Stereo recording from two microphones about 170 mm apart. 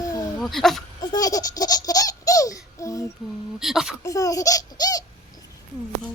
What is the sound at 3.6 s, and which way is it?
Speech, centre (ahead or behind).